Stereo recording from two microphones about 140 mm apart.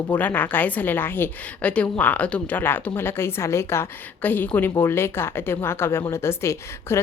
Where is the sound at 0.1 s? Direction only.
10° left (ahead or behind).